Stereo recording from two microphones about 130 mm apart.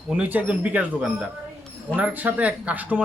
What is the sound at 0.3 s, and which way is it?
Speech, 10° right (ahead or behind).